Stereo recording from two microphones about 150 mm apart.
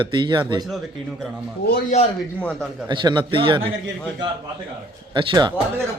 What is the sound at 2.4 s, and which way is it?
Speech, 5° left (ahead or behind).